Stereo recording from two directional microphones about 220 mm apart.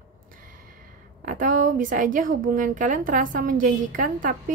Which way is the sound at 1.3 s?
35° right (ahead or behind).